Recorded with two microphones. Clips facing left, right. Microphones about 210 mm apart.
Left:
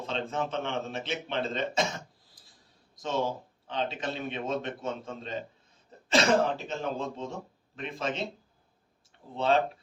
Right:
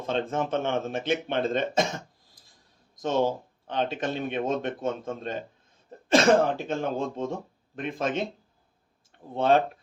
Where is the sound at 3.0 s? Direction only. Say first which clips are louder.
Right 5 dB; 50° right (ahead or behind).